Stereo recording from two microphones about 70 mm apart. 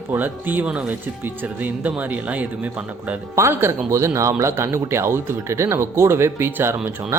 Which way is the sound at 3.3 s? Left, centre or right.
Right.